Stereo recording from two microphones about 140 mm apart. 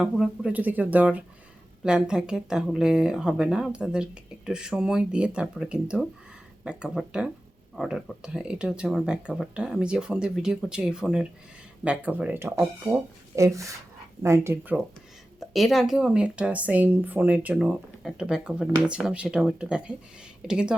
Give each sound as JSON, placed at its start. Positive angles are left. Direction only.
{"t": 0.0, "sound": "a woman's voice", "side_deg": -5}
{"t": 15.4, "sound": "a woman's voice", "side_deg": 0}